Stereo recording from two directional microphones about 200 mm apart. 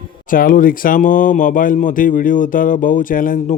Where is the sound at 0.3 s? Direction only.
45° left (ahead or behind).